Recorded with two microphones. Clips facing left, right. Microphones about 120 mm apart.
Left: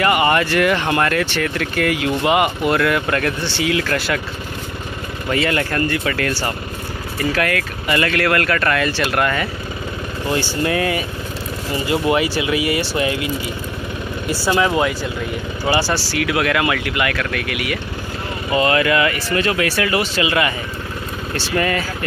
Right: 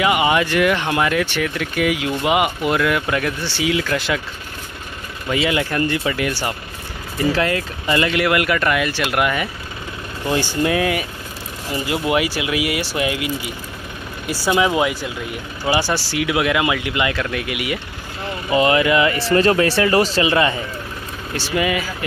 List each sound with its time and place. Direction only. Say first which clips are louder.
0.0 s speech: left 1 dB; 5° right (ahead or behind)
5.3 s speech: even; 10° right (ahead or behind)
7.3 s speech: even; 25° right (ahead or behind); by 13.3 s 10° right (ahead or behind)
14.3 s speech: even; 15° right (ahead or behind); by 20.5 s 30° right (ahead or behind)
21.4 s speech: even; 10° right (ahead or behind)